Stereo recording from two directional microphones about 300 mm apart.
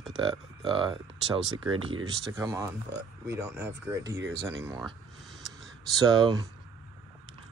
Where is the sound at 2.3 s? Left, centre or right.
Centre.